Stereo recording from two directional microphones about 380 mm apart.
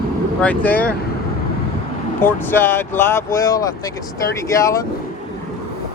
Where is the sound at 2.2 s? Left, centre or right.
Centre.